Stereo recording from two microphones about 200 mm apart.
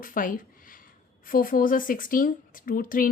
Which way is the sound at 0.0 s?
45° left (ahead or behind).